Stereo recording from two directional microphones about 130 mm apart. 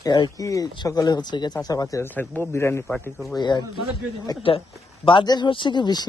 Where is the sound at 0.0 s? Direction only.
30° left (ahead or behind).